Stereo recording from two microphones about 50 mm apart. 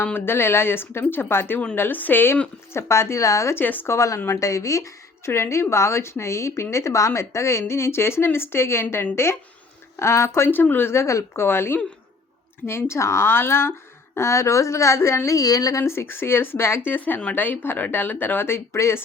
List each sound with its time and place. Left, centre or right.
0.0 s speech: left
2.7 s a woman's voice: left
3.5 s speech: left
3.8 s a woman's voice: left
10.5 s speech: left
10.9 s a woman's voice: left
11.4 s speech: left
14.2 s speech: left
17.3 s speech: left
18.4 s speech: left